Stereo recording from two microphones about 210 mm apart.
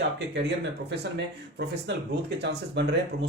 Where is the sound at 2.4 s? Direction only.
55° right (ahead or behind).